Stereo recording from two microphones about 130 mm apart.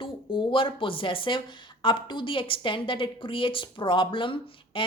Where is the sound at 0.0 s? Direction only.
40° left (ahead or behind).